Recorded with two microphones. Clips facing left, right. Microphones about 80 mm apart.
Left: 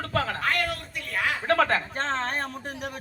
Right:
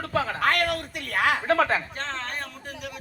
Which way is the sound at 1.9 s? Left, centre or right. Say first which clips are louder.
Left 5 dB; left.